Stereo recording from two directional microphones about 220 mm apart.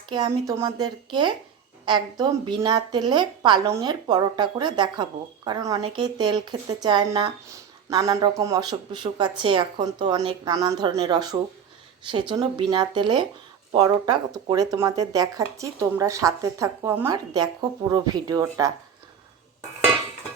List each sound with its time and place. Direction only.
0.1 s a woman's voice: 15° right (ahead or behind)